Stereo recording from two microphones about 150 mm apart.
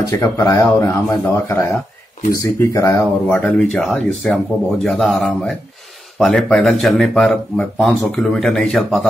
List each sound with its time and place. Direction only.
0.1 s speech: 20° left (ahead or behind); by 9.0 s centre (ahead or behind)